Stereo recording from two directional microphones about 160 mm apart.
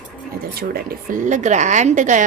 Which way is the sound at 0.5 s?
70° right (ahead or behind).